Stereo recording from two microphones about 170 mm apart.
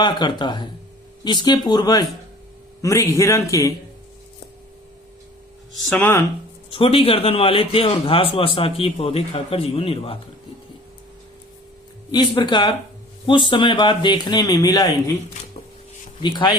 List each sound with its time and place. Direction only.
0.0 s speech: 25° left (ahead or behind)
5.7 s speech: centre (ahead or behind)
6.0 s speech: 15° left (ahead or behind)
6.7 s a man's voice: 30° left (ahead or behind)
12.1 s speech: 25° left (ahead or behind)